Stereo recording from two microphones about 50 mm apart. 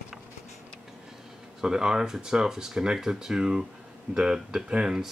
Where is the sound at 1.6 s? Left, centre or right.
Centre.